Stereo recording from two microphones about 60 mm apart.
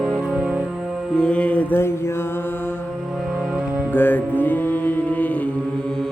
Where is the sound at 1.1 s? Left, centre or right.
Centre.